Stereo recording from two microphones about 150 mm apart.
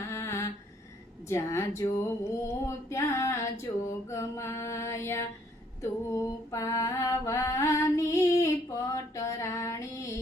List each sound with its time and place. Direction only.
0.1 s humming: 20° left (ahead or behind)
1.3 s a sound: 20° left (ahead or behind)
5.8 s mantra: 20° left (ahead or behind)